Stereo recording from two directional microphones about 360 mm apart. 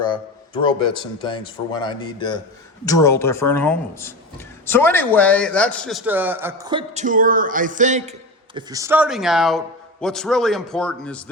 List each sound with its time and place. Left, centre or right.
0.0 s speech: centre
8.5 s speech: centre